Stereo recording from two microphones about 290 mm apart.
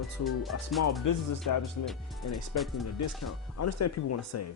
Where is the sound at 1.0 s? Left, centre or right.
Left.